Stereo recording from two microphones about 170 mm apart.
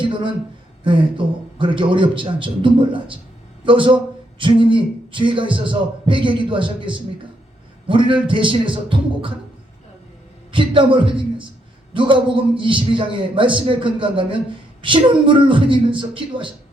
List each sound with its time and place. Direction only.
0.0 s a sound: 30° right (ahead or behind)
0.9 s speech: 30° right (ahead or behind)
10.5 s a man's voice: 30° right (ahead or behind)